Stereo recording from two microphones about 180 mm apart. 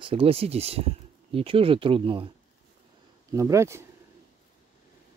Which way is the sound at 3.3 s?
15° right (ahead or behind).